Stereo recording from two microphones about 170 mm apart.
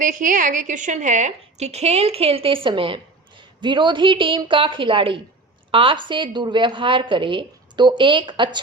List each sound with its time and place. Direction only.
0.0 s a woman's voice: 50° right (ahead or behind); by 8.6 s 25° right (ahead or behind)